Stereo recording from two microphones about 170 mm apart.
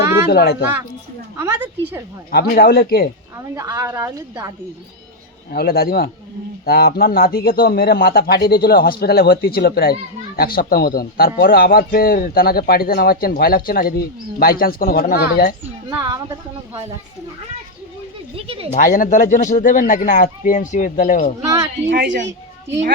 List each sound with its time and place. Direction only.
0.3 s a man's voice: 65° left (ahead or behind)
1.4 s a woman's voice: 15° right (ahead or behind)
2.3 s a man's voice: 65° left (ahead or behind)
3.3 s a woman's voice: 15° right (ahead or behind)
5.5 s a man's voice: 65° left (ahead or behind)
15.9 s a woman's voice: 20° right (ahead or behind)
18.3 s speech: 35° right (ahead or behind)
18.7 s speech: 55° left (ahead or behind)
21.8 s a woman's voice: 90° right